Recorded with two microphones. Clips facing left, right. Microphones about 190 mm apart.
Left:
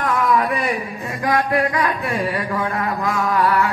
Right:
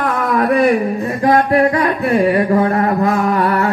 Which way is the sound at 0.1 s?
55° right (ahead or behind).